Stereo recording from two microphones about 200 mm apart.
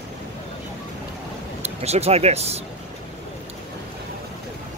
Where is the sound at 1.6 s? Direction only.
30° right (ahead or behind).